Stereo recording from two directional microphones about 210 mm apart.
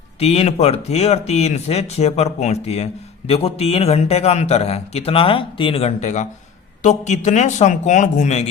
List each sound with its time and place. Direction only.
0.2 s speech: 30° left (ahead or behind)